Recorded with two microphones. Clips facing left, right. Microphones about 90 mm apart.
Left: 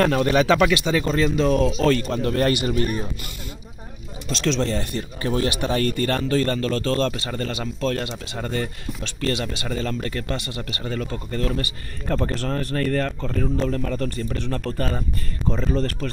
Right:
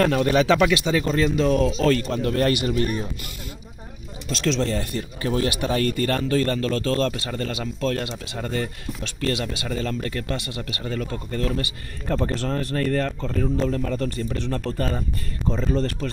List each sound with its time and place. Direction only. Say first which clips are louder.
0.0 s speech: left 1 dB; centre (ahead or behind)
4.3 s speech: even; 10° right (ahead or behind)